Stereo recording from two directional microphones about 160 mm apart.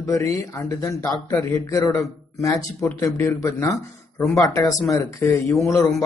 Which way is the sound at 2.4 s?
20° left (ahead or behind).